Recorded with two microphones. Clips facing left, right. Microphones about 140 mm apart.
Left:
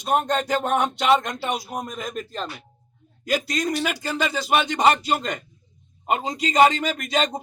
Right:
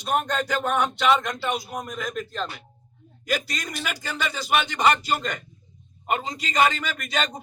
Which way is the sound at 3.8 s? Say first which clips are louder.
Left 5 dB; 35° left (ahead or behind).